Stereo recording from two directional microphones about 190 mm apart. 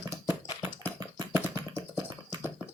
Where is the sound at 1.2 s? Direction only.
20° right (ahead or behind).